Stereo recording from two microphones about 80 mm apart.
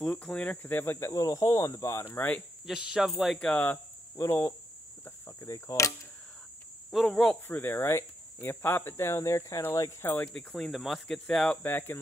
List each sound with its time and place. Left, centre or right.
0.0 s speech: centre
0.9 s speech: left
2.1 s speech: centre
2.6 s speech: centre
3.3 s speech: centre
4.2 s speech: left
5.4 s speech: left
6.9 s speech: centre
7.4 s speech: left
10.0 s speech: left
10.3 s speech: centre
11.6 s speech: left